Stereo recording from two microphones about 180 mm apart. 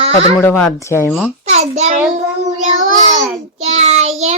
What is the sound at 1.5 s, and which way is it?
Speech, 40° right (ahead or behind).